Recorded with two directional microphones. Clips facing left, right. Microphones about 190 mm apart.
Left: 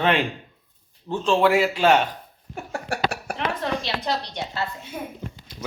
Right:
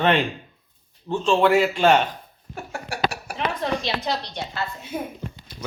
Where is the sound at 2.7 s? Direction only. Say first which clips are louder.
Left 1 dB; 50° left (ahead or behind).